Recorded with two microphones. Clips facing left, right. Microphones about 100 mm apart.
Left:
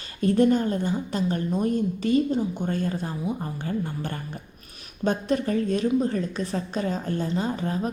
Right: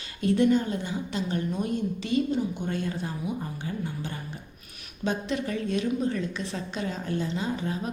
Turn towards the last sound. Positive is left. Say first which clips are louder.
# left 3 dB
turn(degrees=40)  # may be behind; listen again after turning